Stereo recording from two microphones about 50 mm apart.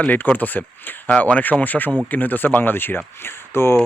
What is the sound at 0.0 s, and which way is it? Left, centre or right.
Speech, left.